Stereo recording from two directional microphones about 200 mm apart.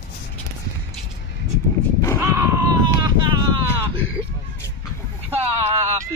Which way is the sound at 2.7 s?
20° right (ahead or behind).